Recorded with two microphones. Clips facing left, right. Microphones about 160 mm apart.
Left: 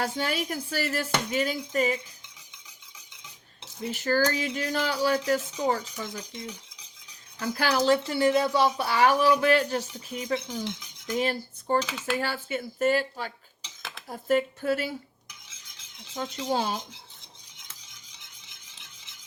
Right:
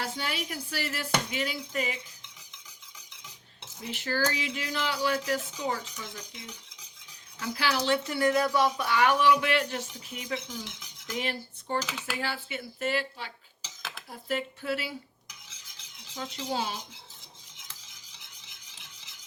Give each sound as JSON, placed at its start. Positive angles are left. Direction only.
{"t": 0.0, "sound": "speech", "side_deg": 45}
{"t": 3.8, "sound": "speech", "side_deg": 45}
{"t": 11.8, "sound": "speech", "side_deg": 0}
{"t": 12.2, "sound": "speech", "side_deg": 45}
{"t": 16.1, "sound": "speech", "side_deg": 40}